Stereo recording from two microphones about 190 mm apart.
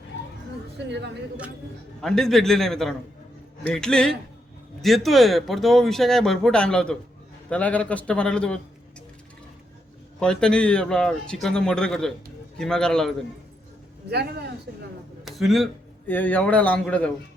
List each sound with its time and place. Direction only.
0.9 s speech: 65° right (ahead or behind)
2.0 s speech: centre (ahead or behind)
10.2 s speech: 5° left (ahead or behind)
14.1 s speech: 60° right (ahead or behind)
15.2 s speech: centre (ahead or behind)